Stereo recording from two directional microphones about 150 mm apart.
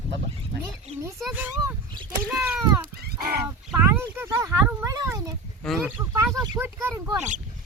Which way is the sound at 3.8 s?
20° right (ahead or behind).